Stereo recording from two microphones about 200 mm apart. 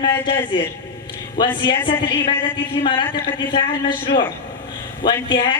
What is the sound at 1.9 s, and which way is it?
A man's voice, 25° left (ahead or behind).